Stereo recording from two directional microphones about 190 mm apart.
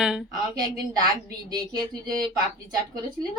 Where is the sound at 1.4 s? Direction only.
20° right (ahead or behind).